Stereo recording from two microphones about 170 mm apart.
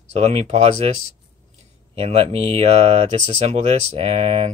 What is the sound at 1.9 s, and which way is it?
Speech, 35° right (ahead or behind).